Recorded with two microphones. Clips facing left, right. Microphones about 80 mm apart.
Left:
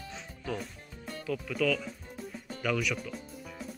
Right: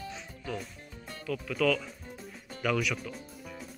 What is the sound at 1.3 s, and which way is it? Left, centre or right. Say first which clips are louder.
Speech: even; left.